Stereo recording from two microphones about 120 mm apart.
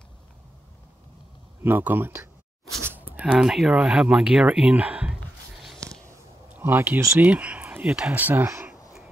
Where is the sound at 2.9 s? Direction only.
15° right (ahead or behind).